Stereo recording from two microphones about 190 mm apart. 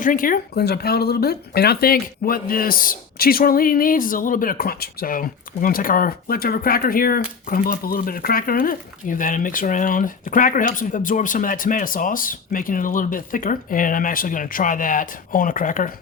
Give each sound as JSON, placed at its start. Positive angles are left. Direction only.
{"t": 0.0, "sound": "speech", "side_deg": 45}